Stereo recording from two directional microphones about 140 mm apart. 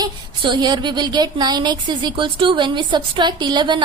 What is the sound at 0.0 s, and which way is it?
Speech, 30° right (ahead or behind).